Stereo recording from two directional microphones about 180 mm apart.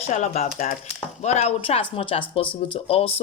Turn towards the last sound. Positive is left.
turn(degrees=30)  # may be behind; listen again after turning